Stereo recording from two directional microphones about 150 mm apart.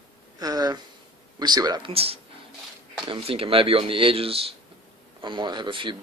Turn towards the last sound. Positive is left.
turn(degrees=-35)  # may be behind; listen again after turning